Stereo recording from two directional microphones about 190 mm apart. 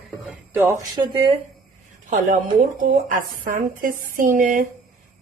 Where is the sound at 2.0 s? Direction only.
40° right (ahead or behind).